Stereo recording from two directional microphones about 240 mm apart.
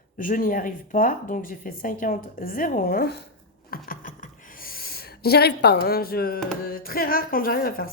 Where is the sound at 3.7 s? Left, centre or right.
Left.